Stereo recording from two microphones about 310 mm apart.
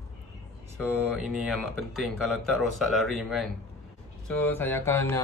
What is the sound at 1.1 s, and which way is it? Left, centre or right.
Speech, centre.